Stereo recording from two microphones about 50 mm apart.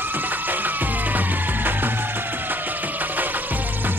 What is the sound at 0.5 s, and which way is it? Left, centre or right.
Music, right.